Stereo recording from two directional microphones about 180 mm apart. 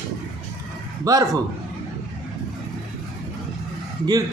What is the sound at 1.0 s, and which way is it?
Speech, 20° right (ahead or behind).